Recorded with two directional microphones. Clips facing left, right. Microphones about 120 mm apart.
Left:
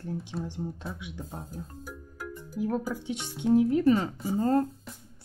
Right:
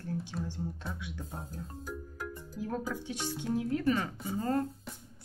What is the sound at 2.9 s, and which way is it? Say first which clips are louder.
Speech: left 2 dB; 20° left (ahead or behind).